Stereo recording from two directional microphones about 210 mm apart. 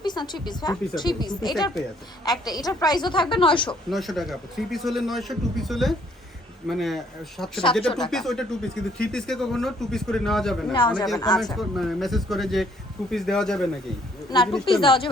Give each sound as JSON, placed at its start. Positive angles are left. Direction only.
{"t": 0.0, "sound": "a woman's voice", "side_deg": 20}
{"t": 3.8, "sound": "speech", "side_deg": 0}
{"t": 10.7, "sound": "a woman's voice", "side_deg": 20}
{"t": 11.8, "sound": "speech", "side_deg": 0}
{"t": 14.6, "sound": "a woman's voice", "side_deg": 25}